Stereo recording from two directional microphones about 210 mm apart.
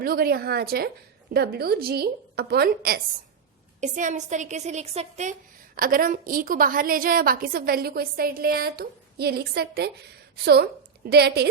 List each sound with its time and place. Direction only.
0.0 s a woman's voice: 45° right (ahead or behind)
3.8 s speech: 35° right (ahead or behind)
5.7 s a woman's voice: 45° right (ahead or behind)